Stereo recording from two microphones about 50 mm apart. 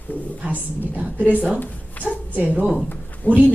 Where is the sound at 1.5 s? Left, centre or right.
Left.